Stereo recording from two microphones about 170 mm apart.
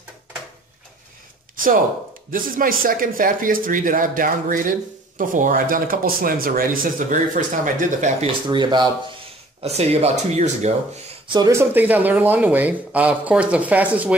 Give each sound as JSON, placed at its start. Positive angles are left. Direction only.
{"t": 2.3, "sound": "speech", "side_deg": -55}
{"t": 8.5, "sound": "speech", "side_deg": -25}
{"t": 9.6, "sound": "speech", "side_deg": -35}
{"t": 11.2, "sound": "speech", "side_deg": -20}